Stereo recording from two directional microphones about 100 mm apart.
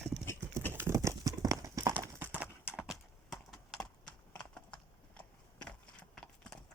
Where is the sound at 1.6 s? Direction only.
35° right (ahead or behind).